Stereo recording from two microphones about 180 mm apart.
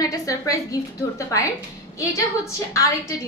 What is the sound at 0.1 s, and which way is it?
A woman's voice, 20° left (ahead or behind).